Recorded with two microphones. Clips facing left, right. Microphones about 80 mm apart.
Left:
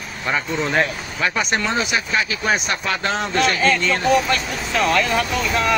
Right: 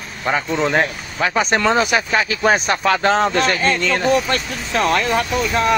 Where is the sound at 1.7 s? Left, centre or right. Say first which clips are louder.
Right 5 dB; right.